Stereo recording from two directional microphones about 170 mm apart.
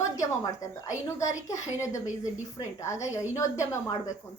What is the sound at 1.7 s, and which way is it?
A woman's voice, 15° left (ahead or behind).